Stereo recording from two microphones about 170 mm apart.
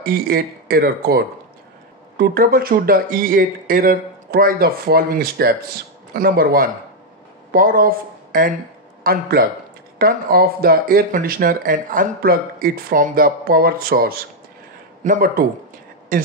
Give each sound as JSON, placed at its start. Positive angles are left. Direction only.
{"t": 0.0, "sound": "speech", "side_deg": -60}